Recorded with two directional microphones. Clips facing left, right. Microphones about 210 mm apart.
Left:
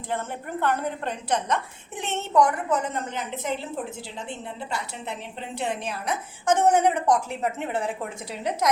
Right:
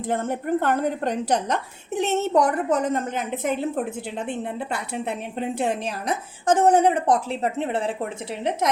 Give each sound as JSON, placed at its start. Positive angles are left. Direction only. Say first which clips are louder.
{"t": 0.1, "sound": "a woman's voice", "louder": "right 7 dB", "side_deg": -45}